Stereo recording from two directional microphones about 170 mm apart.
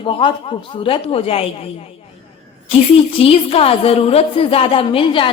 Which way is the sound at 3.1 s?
35° left (ahead or behind).